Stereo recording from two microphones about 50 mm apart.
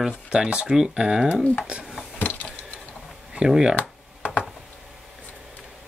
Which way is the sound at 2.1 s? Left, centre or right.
Left.